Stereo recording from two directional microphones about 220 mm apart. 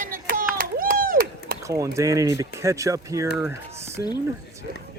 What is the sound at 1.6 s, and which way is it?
Speech, 15° right (ahead or behind).